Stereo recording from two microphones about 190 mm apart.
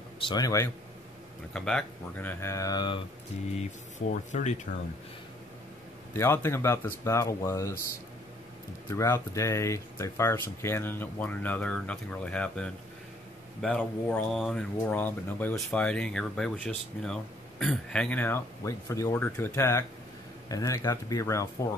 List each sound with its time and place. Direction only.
0.2 s speech: 20° left (ahead or behind)
1.5 s speech: 5° left (ahead or behind); by 3.0 s 20° left (ahead or behind)
4.3 s speech: 35° left (ahead or behind)
6.1 s speech: 10° left (ahead or behind)
8.9 s speech: 15° left (ahead or behind)